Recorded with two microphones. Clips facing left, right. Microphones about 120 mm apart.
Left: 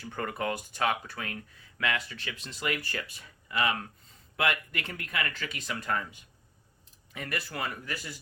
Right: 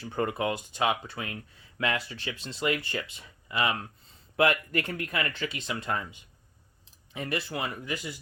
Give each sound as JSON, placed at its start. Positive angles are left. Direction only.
{"t": 0.0, "sound": "speech", "side_deg": -30}
{"t": 0.3, "sound": "speech", "side_deg": -15}
{"t": 4.4, "sound": "speech", "side_deg": -35}